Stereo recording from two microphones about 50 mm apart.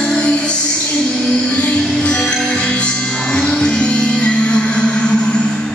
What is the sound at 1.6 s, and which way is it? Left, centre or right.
Music, left.